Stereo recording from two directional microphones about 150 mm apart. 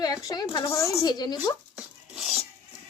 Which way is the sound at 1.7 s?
Centre (ahead or behind).